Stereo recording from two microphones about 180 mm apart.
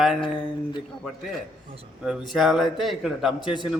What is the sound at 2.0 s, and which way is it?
A man's voice, centre (ahead or behind).